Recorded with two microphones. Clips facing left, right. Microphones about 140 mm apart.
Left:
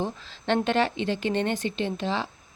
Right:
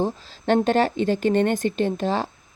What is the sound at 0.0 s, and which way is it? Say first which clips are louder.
Speech: right 6 dB; 40° right (ahead or behind).